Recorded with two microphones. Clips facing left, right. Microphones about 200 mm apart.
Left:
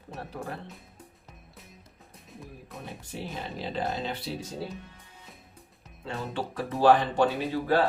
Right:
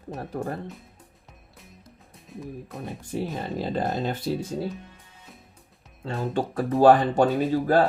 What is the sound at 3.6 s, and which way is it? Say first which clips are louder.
Speech: right 4 dB; 50° right (ahead or behind).